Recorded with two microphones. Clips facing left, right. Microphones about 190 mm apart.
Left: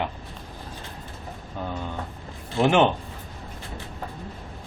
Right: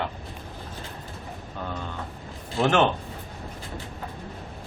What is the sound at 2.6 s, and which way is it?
Speech, 15° left (ahead or behind).